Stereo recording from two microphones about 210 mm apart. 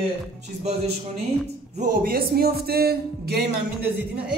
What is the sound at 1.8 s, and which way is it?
A man's voice, 40° right (ahead or behind).